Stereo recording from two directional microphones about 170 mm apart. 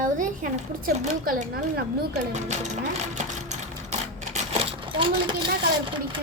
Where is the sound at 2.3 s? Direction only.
45° right (ahead or behind).